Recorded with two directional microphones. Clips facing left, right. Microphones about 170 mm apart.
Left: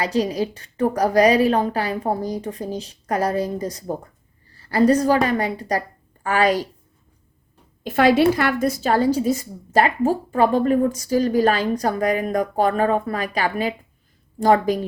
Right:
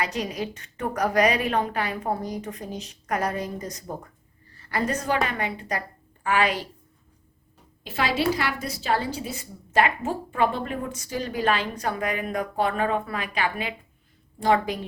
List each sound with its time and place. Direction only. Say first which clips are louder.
0.0 s a woman's voice: left 7 dB; 30° left (ahead or behind)
7.9 s a woman's voice: left 9 dB; 55° left (ahead or behind)